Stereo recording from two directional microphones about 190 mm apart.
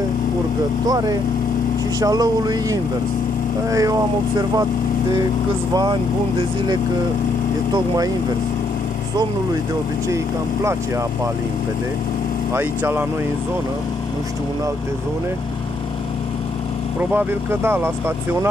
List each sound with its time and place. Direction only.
0.8 s speech: 20° right (ahead or behind)
7.7 s speech: 20° right (ahead or behind)
10.0 s speech: 15° right (ahead or behind)
12.5 s speech: 10° right (ahead or behind)
17.1 s speech: 10° right (ahead or behind)